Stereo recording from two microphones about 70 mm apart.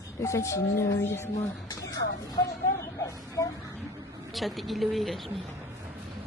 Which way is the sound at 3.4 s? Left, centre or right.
Left.